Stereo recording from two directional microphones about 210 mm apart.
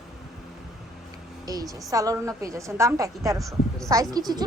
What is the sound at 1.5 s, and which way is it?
A woman's voice, 15° right (ahead or behind).